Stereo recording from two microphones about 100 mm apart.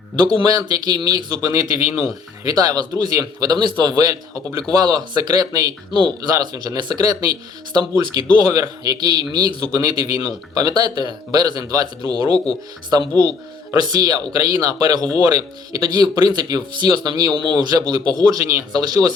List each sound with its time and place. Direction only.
0.4 s speech: 40° right (ahead or behind)